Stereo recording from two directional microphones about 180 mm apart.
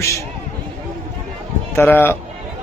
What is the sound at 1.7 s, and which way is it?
Speech, 10° left (ahead or behind).